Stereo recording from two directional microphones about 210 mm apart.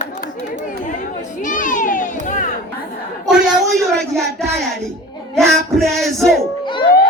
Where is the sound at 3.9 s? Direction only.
Centre (ahead or behind).